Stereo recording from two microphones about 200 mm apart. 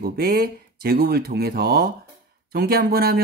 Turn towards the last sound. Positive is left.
turn(degrees=-50)  # may be behind; listen again after turning